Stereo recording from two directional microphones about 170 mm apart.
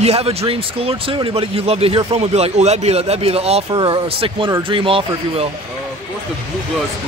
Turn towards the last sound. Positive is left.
turn(degrees=-30)  # may be behind; listen again after turning